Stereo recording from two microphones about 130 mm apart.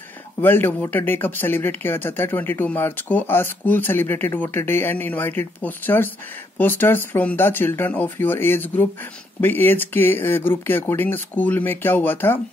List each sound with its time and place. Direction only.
0.4 s speech: 15° left (ahead or behind)